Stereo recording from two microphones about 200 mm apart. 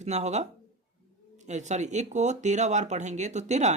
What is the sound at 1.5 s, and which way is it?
Speech, 35° right (ahead or behind).